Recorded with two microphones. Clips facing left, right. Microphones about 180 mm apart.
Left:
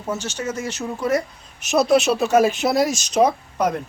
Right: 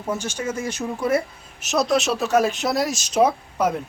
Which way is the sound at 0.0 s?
10° right (ahead or behind).